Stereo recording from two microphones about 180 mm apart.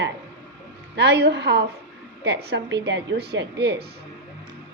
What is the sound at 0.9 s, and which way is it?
A woman's voice, 70° right (ahead or behind).